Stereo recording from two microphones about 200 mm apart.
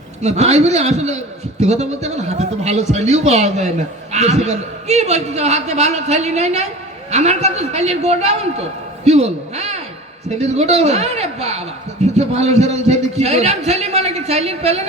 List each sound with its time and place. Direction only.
0.2 s a man's voice: 35° right (ahead or behind)